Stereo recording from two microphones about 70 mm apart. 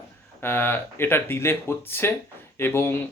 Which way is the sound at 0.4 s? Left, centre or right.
Left.